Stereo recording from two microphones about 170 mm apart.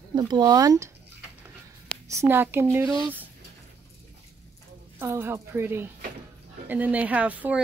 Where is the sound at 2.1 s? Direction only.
15° right (ahead or behind).